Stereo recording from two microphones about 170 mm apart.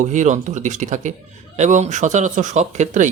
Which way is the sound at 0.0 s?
45° right (ahead or behind).